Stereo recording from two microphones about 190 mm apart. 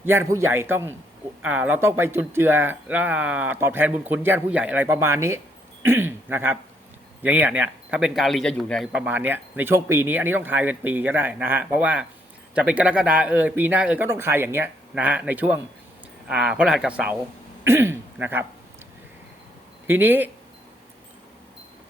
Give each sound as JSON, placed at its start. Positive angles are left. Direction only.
{"t": 0.0, "sound": "speech", "side_deg": -10}
{"t": 19.9, "sound": "speech", "side_deg": -10}